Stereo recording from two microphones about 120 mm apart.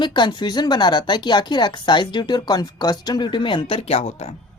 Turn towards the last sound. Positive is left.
turn(degrees=65)  # may be behind; listen again after turning